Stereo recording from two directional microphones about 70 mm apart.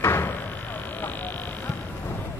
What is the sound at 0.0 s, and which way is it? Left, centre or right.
Music, left.